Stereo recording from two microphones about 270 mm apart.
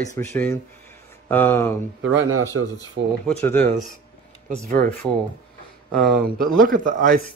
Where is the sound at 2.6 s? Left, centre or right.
Right.